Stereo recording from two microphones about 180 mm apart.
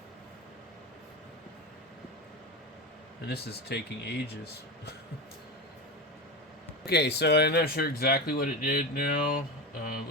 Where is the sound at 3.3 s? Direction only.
65° left (ahead or behind).